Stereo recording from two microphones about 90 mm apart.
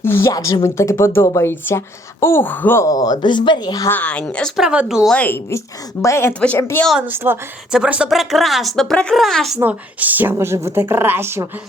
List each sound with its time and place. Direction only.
0.0 s speech: 25° left (ahead or behind)
0.3 s speech: 45° left (ahead or behind)
0.6 s speech: 30° left (ahead or behind)
2.8 s speech: 45° left (ahead or behind)
3.8 s speech: 15° left (ahead or behind)
4.5 s speech: 10° right (ahead or behind)
5.1 s speech: 15° left (ahead or behind)
5.5 s speech: 35° left (ahead or behind)
7.0 s speech: 20° right (ahead or behind)
7.7 s speech: 10° right (ahead or behind)
9.6 s speech: 20° right (ahead or behind)
10.3 s speech: 30° right (ahead or behind)